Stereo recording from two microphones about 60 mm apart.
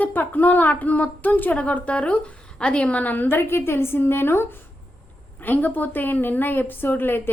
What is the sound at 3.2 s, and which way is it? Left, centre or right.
A woman's voice, left.